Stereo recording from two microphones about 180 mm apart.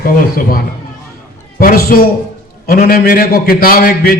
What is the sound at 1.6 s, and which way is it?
A man's voice, 55° left (ahead or behind).